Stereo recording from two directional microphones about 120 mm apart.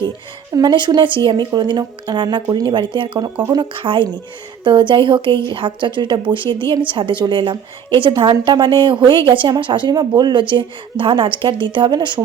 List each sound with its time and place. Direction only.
0.5 s a woman's voice: 35° right (ahead or behind)